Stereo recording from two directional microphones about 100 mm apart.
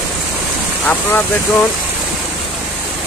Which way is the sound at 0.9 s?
20° left (ahead or behind).